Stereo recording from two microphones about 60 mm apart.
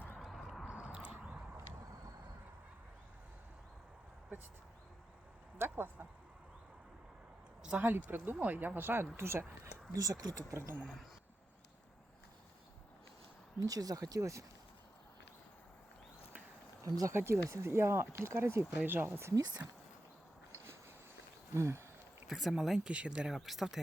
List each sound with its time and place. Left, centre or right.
0.2 s a sound: centre
0.6 s a sound: centre
0.9 s biting: right
5.5 s speech: right
7.8 s speech: right
9.9 s speech: right
10.5 s speech: right
13.7 s speech: right
14.2 s speech: right
16.8 s speech: right
17.1 s speech: right
21.5 s a sound: right
22.3 s speech: centre
23.3 s speech: centre